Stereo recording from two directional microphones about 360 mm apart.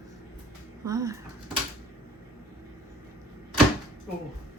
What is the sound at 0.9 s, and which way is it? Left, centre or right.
Speech, centre.